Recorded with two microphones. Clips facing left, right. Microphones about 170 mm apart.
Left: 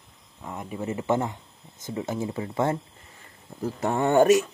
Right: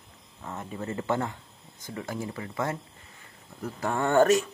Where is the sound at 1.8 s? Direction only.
20° left (ahead or behind).